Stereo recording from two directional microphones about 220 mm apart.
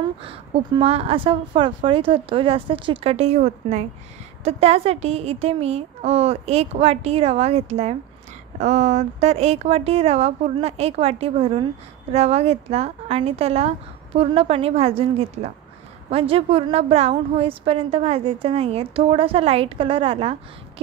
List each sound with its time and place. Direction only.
0.2 s a woman's voice: 25° right (ahead or behind)